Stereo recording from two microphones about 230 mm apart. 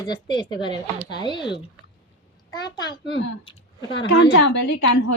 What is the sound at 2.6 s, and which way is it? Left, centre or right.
Child singing, centre.